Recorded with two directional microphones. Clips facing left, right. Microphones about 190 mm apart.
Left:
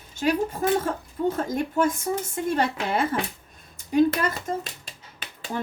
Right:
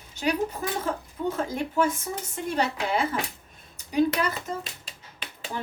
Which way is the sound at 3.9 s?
50° left (ahead or behind).